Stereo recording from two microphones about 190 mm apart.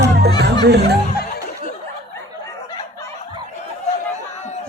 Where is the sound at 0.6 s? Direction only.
60° right (ahead or behind).